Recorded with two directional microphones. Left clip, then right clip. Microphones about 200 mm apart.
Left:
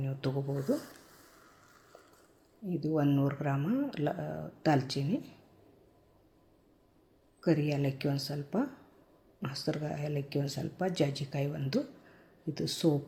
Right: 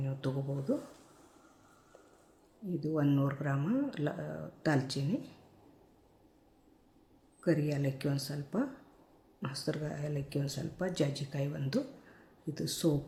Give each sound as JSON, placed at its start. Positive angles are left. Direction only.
{"t": 0.0, "sound": "a sound", "side_deg": 10}
{"t": 2.6, "sound": "speech", "side_deg": 10}
{"t": 7.4, "sound": "speech", "side_deg": 10}